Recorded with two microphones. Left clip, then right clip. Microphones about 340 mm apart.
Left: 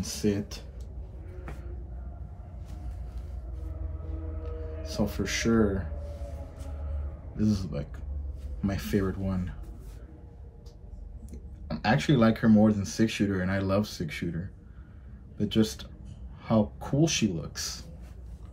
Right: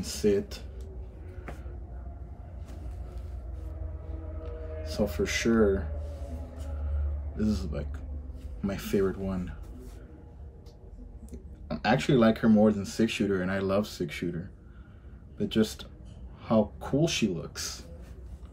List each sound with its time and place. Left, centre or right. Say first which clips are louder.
0.0 s speech: right 4 dB; centre
4.4 s music: right 2 dB; centre
7.3 s speech: left 1 dB; centre
11.2 s speech: right 2 dB; centre
15.3 s speech: even; centre